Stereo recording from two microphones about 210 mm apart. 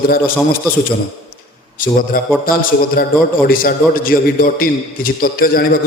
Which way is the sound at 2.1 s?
45° left (ahead or behind).